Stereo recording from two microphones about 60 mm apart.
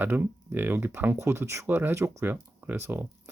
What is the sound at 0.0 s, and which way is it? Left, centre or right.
Speech, right.